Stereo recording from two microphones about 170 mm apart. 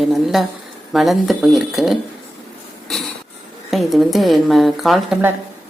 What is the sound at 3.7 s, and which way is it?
A woman's voice, centre (ahead or behind).